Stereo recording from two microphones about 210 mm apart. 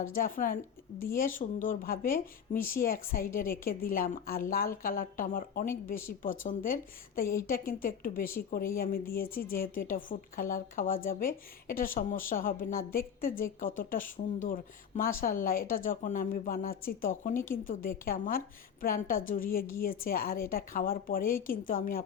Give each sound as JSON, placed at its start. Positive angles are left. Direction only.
{"t": 0.0, "sound": "a woman's voice", "side_deg": 40}
{"t": 17.3, "sound": "speech", "side_deg": 10}
{"t": 17.7, "sound": "a woman's voice", "side_deg": 40}